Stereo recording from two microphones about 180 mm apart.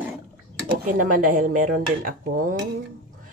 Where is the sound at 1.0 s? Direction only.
50° right (ahead or behind).